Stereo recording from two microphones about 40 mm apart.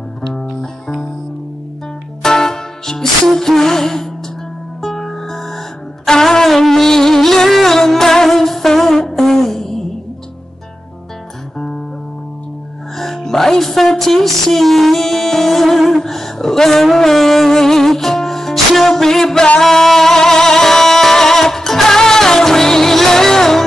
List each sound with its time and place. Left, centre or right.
0.3 s music: centre
2.2 s music: centre
12.9 s music: centre
16.0 s a sound: centre
19.6 s music: centre